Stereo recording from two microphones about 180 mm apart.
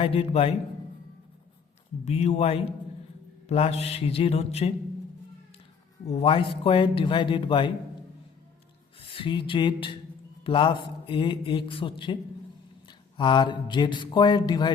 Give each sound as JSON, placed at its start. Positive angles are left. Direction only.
{"t": 0.0, "sound": "speech", "side_deg": 30}
{"t": 2.0, "sound": "speech", "side_deg": 35}
{"t": 6.1, "sound": "speech", "side_deg": 30}
{"t": 9.0, "sound": "a sound", "side_deg": 30}
{"t": 10.4, "sound": "speech", "side_deg": 30}